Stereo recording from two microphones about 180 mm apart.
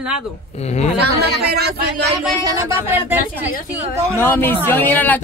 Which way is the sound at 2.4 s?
15° right (ahead or behind).